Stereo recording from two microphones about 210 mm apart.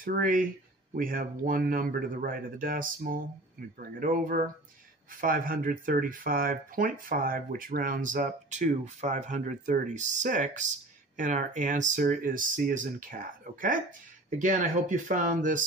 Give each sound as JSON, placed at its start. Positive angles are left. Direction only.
{"t": 0.0, "sound": "speech", "side_deg": -40}